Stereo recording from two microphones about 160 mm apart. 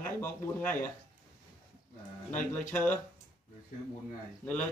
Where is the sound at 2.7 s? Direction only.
10° left (ahead or behind).